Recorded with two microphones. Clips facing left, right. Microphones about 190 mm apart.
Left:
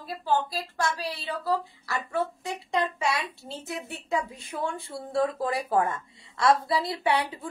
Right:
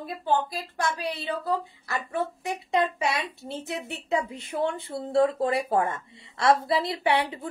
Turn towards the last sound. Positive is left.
turn(degrees=-25)  # may be behind; listen again after turning